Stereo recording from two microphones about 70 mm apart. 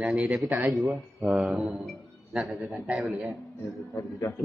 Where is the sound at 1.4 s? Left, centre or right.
Centre.